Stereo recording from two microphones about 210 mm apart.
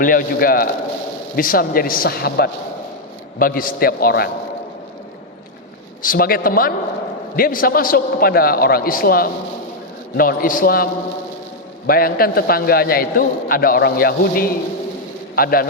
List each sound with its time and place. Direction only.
0.0 s a man's voice: 40° left (ahead or behind)
6.0 s a man's voice: 40° left (ahead or behind)
11.9 s a man's voice: 45° left (ahead or behind)